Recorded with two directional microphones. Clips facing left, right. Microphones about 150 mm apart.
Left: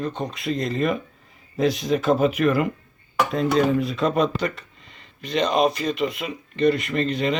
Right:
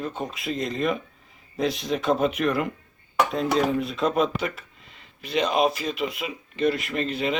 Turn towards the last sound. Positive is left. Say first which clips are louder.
# left 3 dB
turn(degrees=-5)  # may be behind; listen again after turning